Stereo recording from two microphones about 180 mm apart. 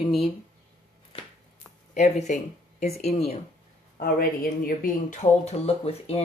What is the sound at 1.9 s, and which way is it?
Speech, 40° left (ahead or behind).